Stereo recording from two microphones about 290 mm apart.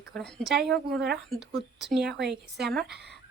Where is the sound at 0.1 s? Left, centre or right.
Centre.